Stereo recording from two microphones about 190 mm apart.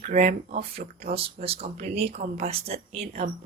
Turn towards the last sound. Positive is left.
turn(degrees=-35)  # may be behind; listen again after turning